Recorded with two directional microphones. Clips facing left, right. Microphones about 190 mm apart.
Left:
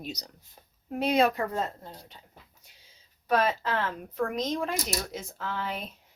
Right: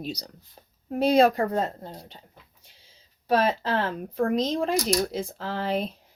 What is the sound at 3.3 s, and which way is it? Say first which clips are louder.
A woman's voice: right 3 dB; 30° right (ahead or behind).